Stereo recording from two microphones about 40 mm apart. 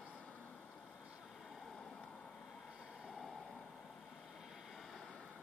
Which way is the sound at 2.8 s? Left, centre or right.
Centre.